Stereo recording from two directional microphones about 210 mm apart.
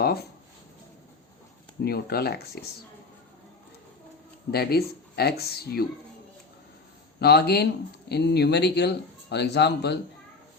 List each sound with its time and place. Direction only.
0.0 s a sound: 50° left (ahead or behind)
1.8 s speech: 50° left (ahead or behind)
4.5 s speech: 50° left (ahead or behind)
7.2 s speech: 50° left (ahead or behind)